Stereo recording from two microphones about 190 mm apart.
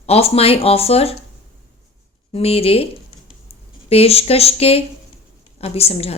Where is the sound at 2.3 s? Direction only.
30° left (ahead or behind).